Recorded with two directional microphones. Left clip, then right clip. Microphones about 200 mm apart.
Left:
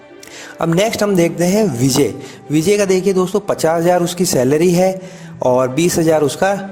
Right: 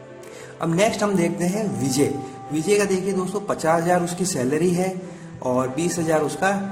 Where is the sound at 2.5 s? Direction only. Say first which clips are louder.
Left 7 dB; 40° left (ahead or behind).